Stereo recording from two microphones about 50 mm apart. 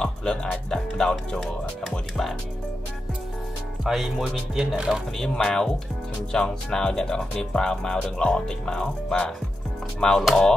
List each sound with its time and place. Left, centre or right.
0.0 s music: centre
0.7 s speech: centre
3.8 s music: centre
5.3 s speech: centre